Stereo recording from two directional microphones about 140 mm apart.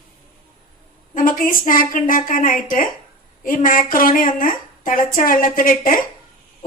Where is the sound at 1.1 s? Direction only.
75° left (ahead or behind).